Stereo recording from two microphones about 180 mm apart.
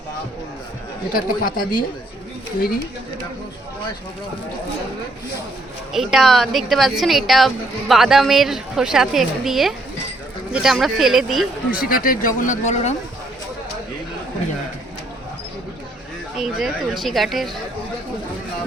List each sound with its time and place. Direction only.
1.1 s speech: 55° left (ahead or behind)
5.9 s a woman's voice: centre (ahead or behind)
11.7 s speech: 50° left (ahead or behind)
16.4 s a woman's voice: centre (ahead or behind)